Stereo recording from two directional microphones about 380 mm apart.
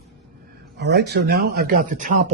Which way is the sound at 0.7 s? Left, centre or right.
Right.